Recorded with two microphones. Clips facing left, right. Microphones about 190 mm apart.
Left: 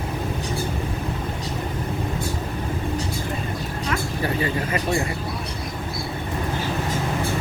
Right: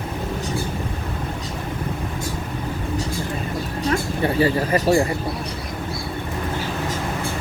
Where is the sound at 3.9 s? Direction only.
30° right (ahead or behind).